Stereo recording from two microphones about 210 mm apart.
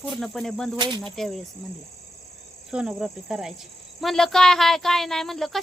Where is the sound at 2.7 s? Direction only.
5° right (ahead or behind).